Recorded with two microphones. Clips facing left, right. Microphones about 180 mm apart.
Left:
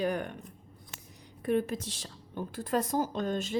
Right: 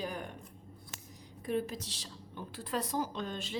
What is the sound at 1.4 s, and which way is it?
A woman's voice, 60° left (ahead or behind).